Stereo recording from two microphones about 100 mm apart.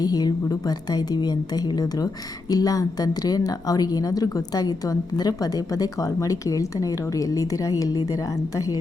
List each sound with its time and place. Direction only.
0.0 s a woman's voice: 40° left (ahead or behind)